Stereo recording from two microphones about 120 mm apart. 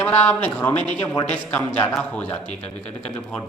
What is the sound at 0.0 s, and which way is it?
A man's voice, 15° left (ahead or behind).